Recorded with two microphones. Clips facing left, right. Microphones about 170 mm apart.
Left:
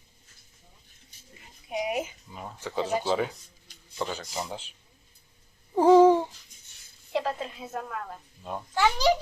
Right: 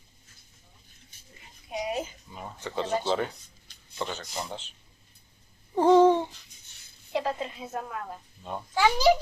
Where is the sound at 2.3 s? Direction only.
Centre (ahead or behind).